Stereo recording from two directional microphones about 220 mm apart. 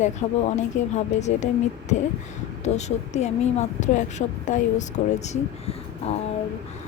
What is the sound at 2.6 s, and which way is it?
Speech, 30° left (ahead or behind).